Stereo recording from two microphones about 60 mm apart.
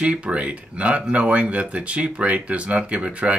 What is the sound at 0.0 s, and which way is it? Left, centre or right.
Speech, centre.